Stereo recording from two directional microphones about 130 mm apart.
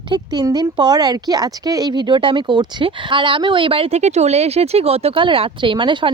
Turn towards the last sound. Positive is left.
turn(degrees=-40)  # may be behind; listen again after turning